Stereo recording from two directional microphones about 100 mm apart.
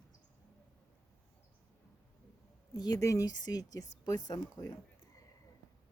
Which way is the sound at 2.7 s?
40° left (ahead or behind).